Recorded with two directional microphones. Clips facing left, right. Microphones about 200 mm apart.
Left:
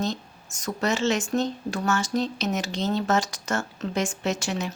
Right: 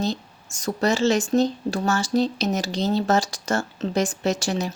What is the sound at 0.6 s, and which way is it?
Speech, 35° right (ahead or behind).